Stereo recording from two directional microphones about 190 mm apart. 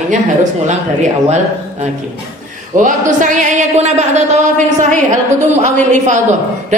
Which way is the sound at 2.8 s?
40° right (ahead or behind).